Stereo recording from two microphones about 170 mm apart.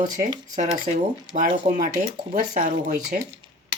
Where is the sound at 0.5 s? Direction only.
45° right (ahead or behind).